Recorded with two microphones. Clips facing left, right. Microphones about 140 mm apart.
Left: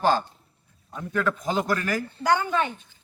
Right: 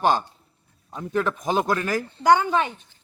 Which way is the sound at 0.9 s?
20° right (ahead or behind).